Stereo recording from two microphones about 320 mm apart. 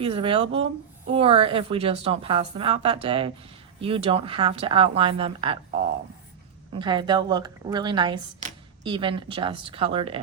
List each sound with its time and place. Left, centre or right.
0.0 s speech: centre
6.7 s speech: centre